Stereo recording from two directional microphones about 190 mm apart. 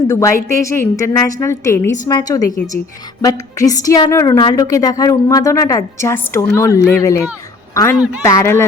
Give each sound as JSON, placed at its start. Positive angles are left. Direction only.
{"t": 0.1, "sound": "a woman's voice", "side_deg": 15}
{"t": 3.6, "sound": "a woman's voice", "side_deg": 20}